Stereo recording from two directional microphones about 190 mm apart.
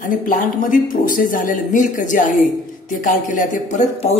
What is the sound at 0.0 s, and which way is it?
A woman's voice, 45° left (ahead or behind).